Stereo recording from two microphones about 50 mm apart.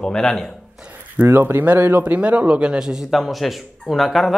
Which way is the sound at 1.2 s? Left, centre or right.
Right.